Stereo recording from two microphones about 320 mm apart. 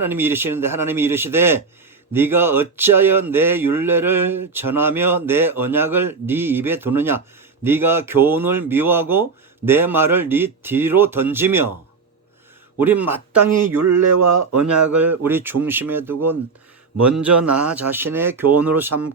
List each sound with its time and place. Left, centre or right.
0.0 s speech: centre
12.8 s speech: centre
13.8 s speech: right
15.2 s speech: centre